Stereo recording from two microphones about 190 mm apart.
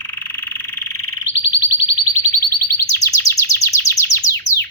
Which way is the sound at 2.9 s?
15° left (ahead or behind).